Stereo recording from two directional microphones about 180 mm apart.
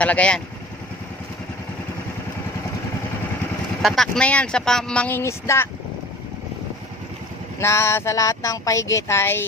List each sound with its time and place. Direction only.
0.0 s speech: 5° left (ahead or behind)
3.8 s speech: centre (ahead or behind)
7.6 s speech: 15° left (ahead or behind)